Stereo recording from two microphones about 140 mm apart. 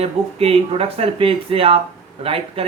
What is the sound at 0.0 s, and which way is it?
Speech, 45° right (ahead or behind).